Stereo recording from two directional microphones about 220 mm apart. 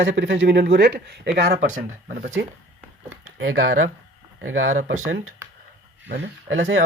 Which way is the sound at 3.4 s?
65° right (ahead or behind).